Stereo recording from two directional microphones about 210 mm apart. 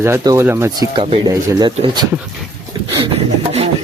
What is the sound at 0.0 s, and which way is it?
Speech, 15° right (ahead or behind).